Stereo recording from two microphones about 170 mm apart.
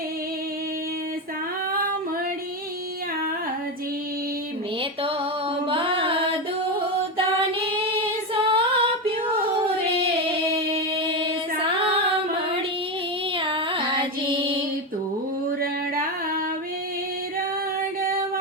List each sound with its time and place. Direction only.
5.6 s mantra: 30° right (ahead or behind)
7.7 s female singing: 30° right (ahead or behind)
10.8 s a sound: 35° right (ahead or behind)
13.3 s music: 30° right (ahead or behind)